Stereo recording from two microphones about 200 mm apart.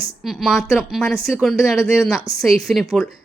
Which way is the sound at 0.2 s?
Centre (ahead or behind).